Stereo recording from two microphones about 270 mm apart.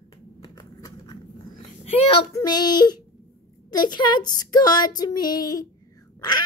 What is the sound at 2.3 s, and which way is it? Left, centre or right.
Speech, centre.